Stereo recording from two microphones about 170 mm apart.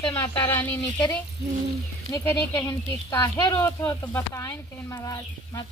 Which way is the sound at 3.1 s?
20° left (ahead or behind).